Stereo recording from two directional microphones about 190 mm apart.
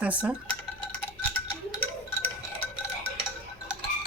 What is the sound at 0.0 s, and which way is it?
Dishes, 5° right (ahead or behind).